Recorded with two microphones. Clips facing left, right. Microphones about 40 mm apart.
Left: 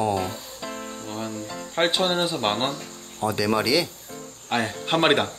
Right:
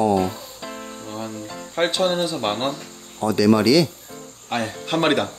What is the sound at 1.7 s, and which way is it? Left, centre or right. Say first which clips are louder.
Speech: right 2 dB; centre.